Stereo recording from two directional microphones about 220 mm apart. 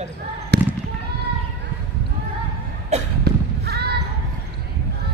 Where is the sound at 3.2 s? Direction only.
45° right (ahead or behind).